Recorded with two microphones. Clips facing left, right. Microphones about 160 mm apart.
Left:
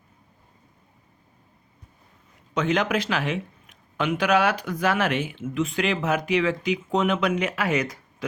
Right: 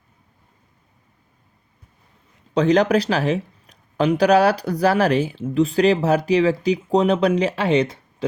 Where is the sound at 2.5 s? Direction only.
35° right (ahead or behind).